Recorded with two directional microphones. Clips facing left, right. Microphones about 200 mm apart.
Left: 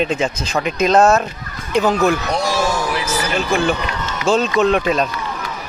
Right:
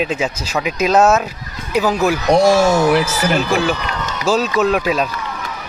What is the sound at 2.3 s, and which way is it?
Speech, 50° right (ahead or behind).